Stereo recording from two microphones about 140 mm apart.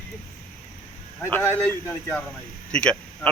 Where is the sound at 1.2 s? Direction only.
20° left (ahead or behind).